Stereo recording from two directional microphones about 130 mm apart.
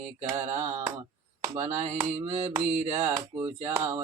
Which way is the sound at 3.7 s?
20° right (ahead or behind).